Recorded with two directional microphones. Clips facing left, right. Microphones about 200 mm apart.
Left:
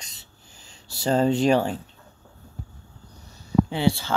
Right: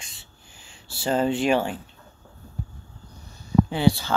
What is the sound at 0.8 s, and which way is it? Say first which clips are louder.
Speech: left 2 dB; 40° left (ahead or behind).